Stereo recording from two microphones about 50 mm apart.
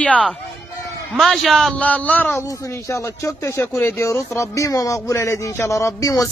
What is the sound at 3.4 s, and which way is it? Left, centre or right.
Speech, left.